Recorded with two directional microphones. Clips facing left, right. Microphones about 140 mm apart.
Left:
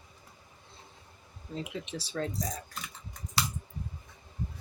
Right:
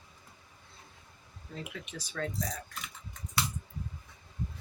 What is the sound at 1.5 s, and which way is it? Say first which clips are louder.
Speech: left 5 dB; 25° left (ahead or behind).